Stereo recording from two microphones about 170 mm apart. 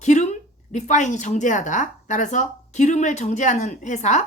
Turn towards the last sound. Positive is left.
turn(degrees=45)  # may be behind; listen again after turning